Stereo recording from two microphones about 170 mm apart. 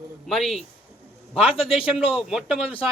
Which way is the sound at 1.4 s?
35° left (ahead or behind).